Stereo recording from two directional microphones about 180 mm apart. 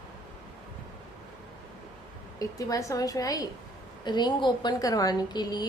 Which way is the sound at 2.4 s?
20° left (ahead or behind).